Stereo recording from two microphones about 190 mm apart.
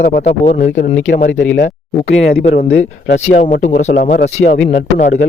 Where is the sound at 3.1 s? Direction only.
35° left (ahead or behind).